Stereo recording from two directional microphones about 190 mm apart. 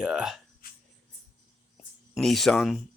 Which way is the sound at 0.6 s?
50° left (ahead or behind).